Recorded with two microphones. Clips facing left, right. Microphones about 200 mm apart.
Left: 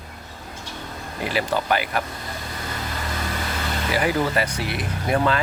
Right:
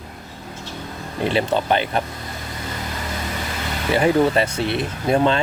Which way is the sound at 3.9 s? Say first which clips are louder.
Right 6 dB; 25° right (ahead or behind).